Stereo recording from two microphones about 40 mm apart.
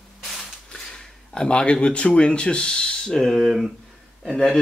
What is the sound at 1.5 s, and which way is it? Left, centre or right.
Speech, left.